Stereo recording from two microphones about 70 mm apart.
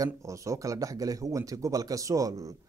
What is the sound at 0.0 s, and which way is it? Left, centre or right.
Speech, right.